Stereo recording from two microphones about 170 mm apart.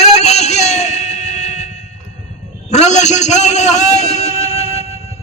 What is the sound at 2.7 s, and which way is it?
A man's voice, 40° left (ahead or behind).